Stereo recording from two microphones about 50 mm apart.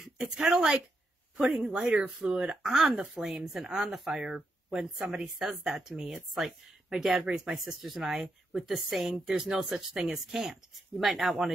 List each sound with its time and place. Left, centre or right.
0.5 s speech: centre
2.0 s speech: centre
2.2 s speech: right; by 11.5 s centre